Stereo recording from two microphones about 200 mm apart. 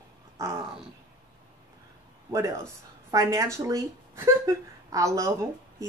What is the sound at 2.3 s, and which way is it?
A woman's voice, 15° right (ahead or behind).